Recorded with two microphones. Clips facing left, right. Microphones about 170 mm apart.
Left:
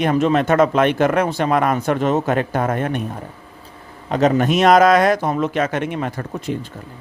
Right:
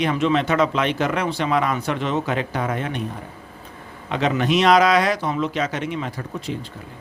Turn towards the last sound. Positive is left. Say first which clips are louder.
# left 4 dB
turn(degrees=50)  # may be behind; listen again after turning